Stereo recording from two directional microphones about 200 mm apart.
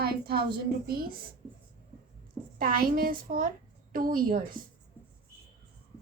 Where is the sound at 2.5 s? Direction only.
45° right (ahead or behind).